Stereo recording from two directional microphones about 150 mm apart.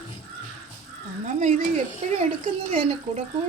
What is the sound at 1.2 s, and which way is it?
Speech, 50° right (ahead or behind).